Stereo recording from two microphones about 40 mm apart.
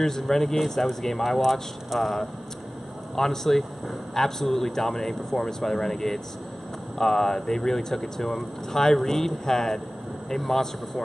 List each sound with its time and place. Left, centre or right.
0.0 s speech: centre
1.4 s speech: centre
3.2 s speech: centre